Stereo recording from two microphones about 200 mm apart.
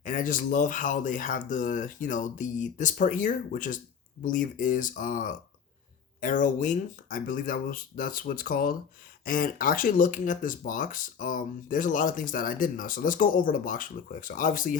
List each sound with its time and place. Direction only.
0.0 s speech: 40° left (ahead or behind)